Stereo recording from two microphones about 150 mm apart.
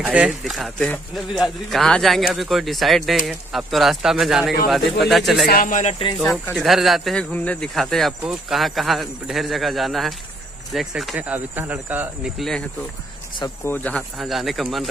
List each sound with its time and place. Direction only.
0.0 s speech: 10° right (ahead or behind)
5.5 s speech: 65° left (ahead or behind)
6.1 s speech: centre (ahead or behind)
12.4 s speech: centre (ahead or behind)
13.7 s speech: 10° left (ahead or behind)
14.1 s speech: centre (ahead or behind)